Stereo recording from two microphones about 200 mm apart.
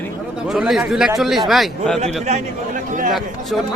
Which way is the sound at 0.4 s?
Centre (ahead or behind).